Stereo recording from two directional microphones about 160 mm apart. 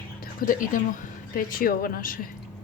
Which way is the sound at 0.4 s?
60° left (ahead or behind).